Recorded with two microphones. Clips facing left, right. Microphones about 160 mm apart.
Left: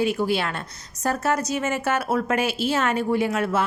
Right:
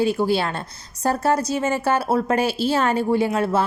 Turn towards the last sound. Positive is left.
turn(degrees=-30)  # may be behind; listen again after turning